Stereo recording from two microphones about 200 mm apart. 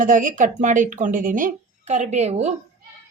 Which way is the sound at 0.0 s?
40° right (ahead or behind).